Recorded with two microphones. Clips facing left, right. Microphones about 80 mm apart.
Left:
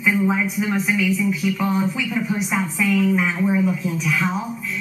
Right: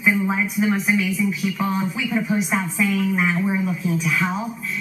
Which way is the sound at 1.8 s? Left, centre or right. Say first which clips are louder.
Left 1 dB; centre.